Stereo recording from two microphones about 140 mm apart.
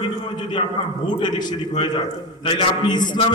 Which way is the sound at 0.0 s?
35° left (ahead or behind).